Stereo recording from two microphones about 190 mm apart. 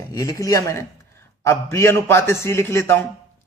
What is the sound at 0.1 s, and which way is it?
A man's voice, 20° left (ahead or behind).